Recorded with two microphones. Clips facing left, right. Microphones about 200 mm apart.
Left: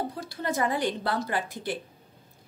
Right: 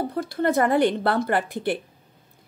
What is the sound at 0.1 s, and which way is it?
Speech, 60° right (ahead or behind).